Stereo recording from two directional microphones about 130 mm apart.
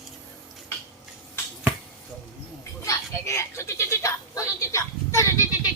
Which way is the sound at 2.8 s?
25° left (ahead or behind).